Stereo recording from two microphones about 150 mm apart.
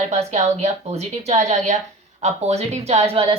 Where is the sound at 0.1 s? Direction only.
45° right (ahead or behind).